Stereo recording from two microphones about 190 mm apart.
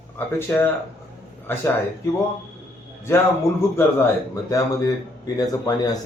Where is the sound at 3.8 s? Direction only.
15° left (ahead or behind).